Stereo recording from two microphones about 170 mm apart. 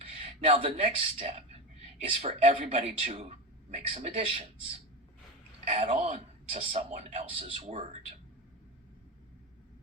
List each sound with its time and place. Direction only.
0.0 s a sound: 35° right (ahead or behind)
0.9 s speech: 35° right (ahead or behind)
5.6 s speech: 40° right (ahead or behind)